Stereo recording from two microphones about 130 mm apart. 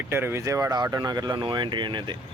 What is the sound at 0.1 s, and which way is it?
Speech, 15° right (ahead or behind).